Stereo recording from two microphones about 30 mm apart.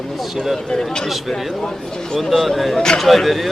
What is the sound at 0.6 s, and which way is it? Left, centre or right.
Speech, left.